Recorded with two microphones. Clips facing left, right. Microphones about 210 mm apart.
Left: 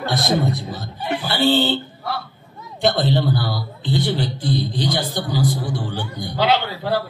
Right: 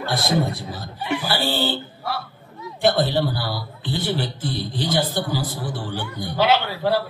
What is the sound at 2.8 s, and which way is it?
A man's voice, 20° left (ahead or behind).